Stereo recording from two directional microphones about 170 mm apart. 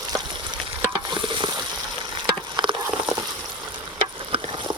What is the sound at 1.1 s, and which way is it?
Stir, 30° right (ahead or behind).